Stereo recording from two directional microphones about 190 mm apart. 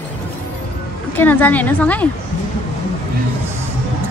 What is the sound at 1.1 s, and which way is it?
Speech, 10° left (ahead or behind).